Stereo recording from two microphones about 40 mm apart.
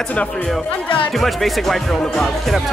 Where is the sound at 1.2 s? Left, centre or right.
Centre.